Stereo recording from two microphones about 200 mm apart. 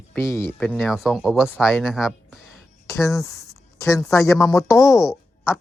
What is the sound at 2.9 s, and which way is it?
A woman's voice, 15° left (ahead or behind).